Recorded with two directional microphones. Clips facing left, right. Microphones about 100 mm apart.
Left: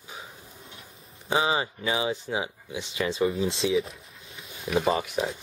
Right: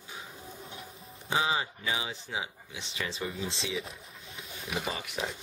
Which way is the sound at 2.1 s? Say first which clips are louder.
Left 7 dB; 55° left (ahead or behind).